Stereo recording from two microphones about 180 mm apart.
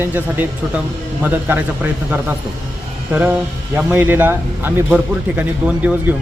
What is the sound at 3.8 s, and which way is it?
Speech, 10° right (ahead or behind).